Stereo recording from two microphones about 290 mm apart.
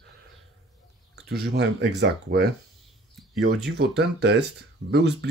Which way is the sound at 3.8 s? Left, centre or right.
Right.